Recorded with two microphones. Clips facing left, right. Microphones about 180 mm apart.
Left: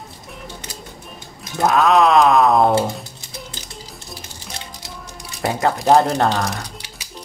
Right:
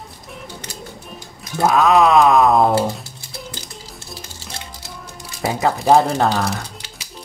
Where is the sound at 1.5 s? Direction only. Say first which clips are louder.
Right 1 dB; centre (ahead or behind).